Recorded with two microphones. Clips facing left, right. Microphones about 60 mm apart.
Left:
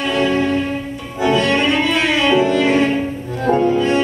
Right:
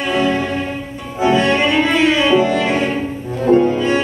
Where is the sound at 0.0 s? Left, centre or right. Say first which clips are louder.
Even; centre; by 2.7 s right.